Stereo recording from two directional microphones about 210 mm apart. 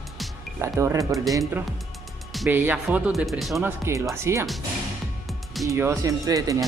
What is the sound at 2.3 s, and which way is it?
Speech, 5° right (ahead or behind).